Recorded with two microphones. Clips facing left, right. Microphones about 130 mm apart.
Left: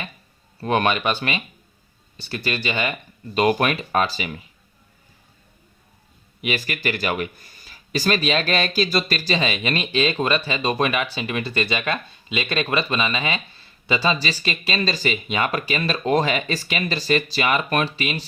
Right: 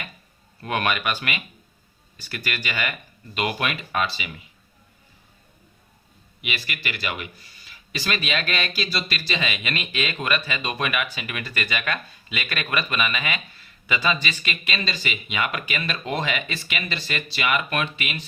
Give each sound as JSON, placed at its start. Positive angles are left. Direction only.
{"t": 0.6, "sound": "speech", "side_deg": 30}
{"t": 3.3, "sound": "speech", "side_deg": 40}
{"t": 6.4, "sound": "speech", "side_deg": 40}